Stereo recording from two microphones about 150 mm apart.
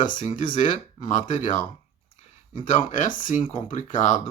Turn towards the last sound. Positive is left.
turn(degrees=60)  # may be behind; listen again after turning